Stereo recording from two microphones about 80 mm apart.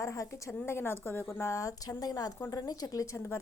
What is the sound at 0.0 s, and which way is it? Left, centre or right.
A woman's voice, left.